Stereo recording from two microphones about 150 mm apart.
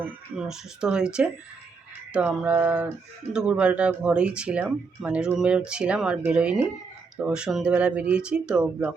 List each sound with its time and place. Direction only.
0.3 s speech: 5° right (ahead or behind)